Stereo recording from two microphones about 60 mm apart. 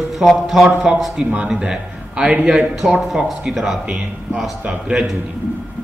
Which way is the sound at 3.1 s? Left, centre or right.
Centre.